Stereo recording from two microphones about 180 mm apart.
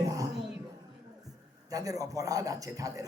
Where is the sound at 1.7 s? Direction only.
20° right (ahead or behind).